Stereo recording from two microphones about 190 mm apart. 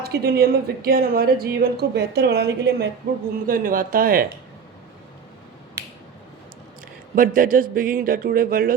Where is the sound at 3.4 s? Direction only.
45° right (ahead or behind).